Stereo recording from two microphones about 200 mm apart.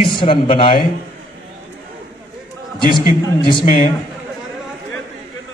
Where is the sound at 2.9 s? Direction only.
45° left (ahead or behind).